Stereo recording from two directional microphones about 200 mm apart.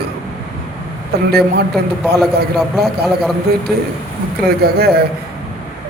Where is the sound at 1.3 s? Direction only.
50° right (ahead or behind).